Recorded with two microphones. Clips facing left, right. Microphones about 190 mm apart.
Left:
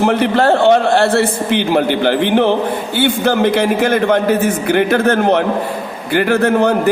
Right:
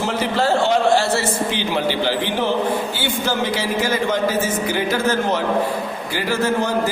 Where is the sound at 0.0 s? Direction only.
60° left (ahead or behind).